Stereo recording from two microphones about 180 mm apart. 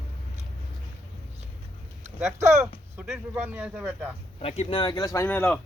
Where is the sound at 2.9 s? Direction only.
Centre (ahead or behind).